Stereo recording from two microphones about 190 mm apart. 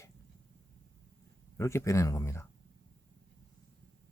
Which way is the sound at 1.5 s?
15° left (ahead or behind).